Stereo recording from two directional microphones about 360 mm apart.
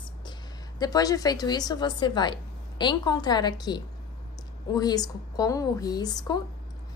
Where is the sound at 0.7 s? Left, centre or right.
Centre.